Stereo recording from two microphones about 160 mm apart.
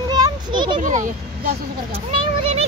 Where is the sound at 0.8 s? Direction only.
55° right (ahead or behind).